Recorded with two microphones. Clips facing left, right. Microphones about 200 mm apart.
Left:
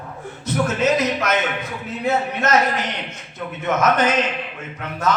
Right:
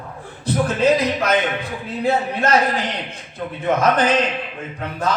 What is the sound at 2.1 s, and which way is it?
Speech, 30° right (ahead or behind).